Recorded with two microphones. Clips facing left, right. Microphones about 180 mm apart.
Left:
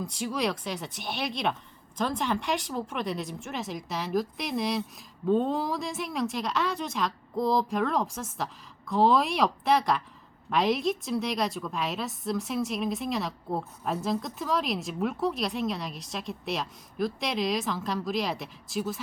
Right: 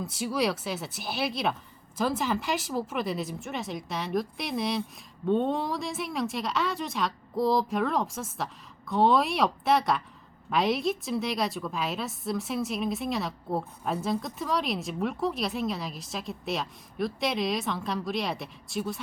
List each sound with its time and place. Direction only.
0.0 s a woman's voice: 5° right (ahead or behind)